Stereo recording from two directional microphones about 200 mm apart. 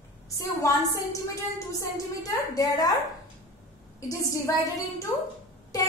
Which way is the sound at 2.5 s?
15° left (ahead or behind).